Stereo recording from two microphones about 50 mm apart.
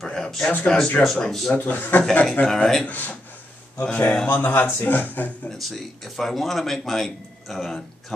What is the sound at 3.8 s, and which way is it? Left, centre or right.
Speech, left.